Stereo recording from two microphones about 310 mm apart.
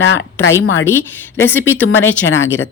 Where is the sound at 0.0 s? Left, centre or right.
Left.